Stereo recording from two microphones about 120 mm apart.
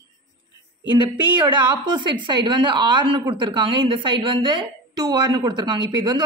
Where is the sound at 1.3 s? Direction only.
40° right (ahead or behind).